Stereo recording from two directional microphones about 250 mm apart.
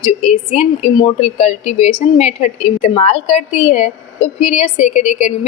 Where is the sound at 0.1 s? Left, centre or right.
Left.